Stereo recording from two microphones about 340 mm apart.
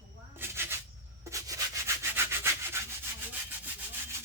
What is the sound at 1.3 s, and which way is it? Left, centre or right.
Rub, centre.